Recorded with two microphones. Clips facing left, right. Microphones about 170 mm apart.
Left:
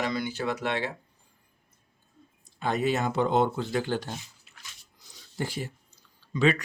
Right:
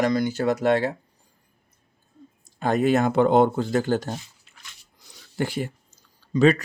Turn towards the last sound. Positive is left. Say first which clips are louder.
# right 6 dB
turn(degrees=-40)  # may be behind; listen again after turning